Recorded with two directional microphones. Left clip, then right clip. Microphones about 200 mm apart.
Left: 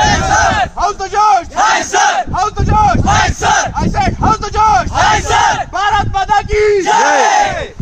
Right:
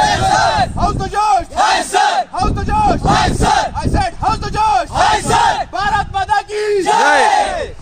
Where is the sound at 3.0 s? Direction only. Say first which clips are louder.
Left 2 dB; 5° left (ahead or behind).